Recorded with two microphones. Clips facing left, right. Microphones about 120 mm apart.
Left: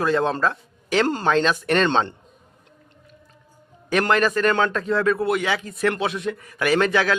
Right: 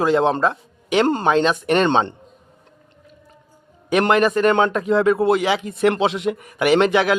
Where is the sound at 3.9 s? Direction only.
15° right (ahead or behind).